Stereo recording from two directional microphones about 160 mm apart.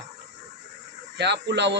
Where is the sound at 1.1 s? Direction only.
90° right.